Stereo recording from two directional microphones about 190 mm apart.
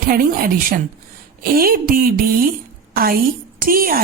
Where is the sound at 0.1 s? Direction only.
50° right (ahead or behind).